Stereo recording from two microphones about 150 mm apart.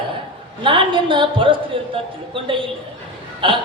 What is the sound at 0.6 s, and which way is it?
A man's voice, 35° right (ahead or behind).